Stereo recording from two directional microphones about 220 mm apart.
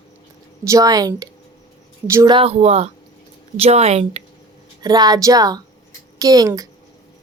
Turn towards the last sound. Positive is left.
turn(degrees=-15)  # may be behind; listen again after turning